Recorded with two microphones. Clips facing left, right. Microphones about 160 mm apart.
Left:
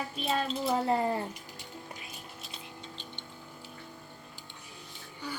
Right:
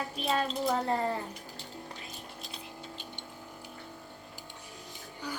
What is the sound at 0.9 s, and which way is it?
Speech, 15° left (ahead or behind).